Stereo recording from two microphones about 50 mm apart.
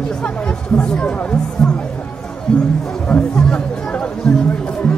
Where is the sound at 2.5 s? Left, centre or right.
Centre.